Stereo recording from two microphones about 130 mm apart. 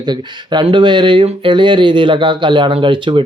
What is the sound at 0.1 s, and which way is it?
Speech, 40° right (ahead or behind).